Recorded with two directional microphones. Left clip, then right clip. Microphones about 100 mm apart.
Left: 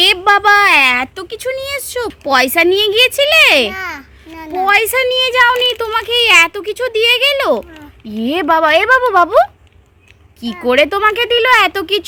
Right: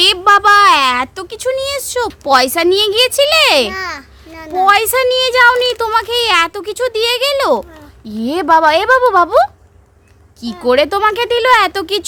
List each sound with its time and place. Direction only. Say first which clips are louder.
0.3 s a sound: right 3 dB; 10° right (ahead or behind)
2.6 s speech: left 1 dB; 15° right (ahead or behind)
3.7 s babbling: right 1 dB; 40° right (ahead or behind)
4.5 s speech: right 1 dB; 15° right (ahead or behind)
10.6 s speech: even; 10° right (ahead or behind)